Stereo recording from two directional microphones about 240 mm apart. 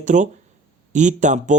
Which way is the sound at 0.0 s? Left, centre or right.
Right.